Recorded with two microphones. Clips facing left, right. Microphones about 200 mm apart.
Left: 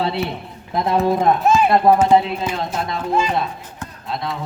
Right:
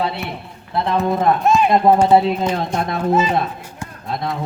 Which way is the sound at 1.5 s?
Centre (ahead or behind).